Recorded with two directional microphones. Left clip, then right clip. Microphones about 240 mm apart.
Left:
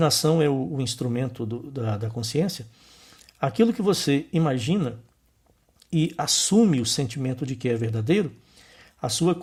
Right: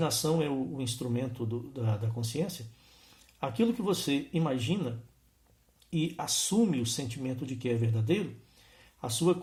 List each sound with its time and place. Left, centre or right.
0.0 s speech: left